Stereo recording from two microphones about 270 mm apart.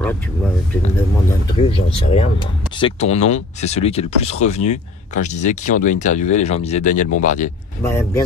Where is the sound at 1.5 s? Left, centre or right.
Centre.